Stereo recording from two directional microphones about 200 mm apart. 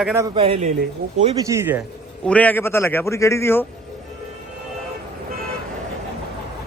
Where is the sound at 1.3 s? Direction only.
15° right (ahead or behind).